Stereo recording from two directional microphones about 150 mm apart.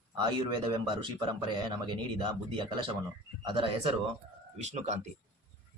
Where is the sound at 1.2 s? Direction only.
30° right (ahead or behind).